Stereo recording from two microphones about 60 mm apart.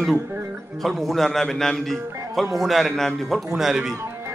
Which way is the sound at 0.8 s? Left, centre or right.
Centre.